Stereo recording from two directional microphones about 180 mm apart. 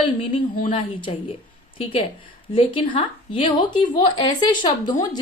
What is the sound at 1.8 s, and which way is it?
A woman's voice, 30° left (ahead or behind).